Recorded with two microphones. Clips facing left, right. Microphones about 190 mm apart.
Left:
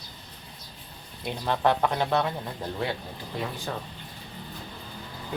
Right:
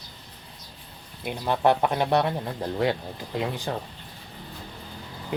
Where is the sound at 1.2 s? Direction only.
15° right (ahead or behind).